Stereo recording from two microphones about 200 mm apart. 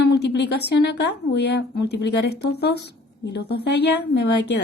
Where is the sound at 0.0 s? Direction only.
60° left (ahead or behind).